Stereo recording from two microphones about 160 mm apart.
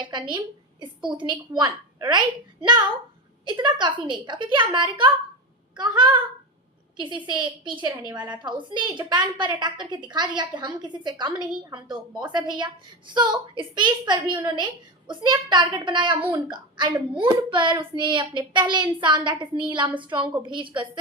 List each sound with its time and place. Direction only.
0.0 s a woman's voice: 30° right (ahead or behind)